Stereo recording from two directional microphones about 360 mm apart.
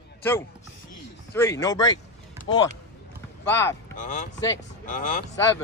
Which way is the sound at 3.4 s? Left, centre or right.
Centre.